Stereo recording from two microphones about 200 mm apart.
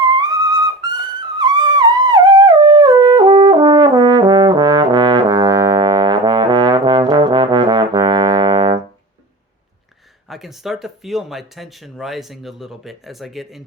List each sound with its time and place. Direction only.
0.0 s music: 20° right (ahead or behind)
10.2 s speech: centre (ahead or behind)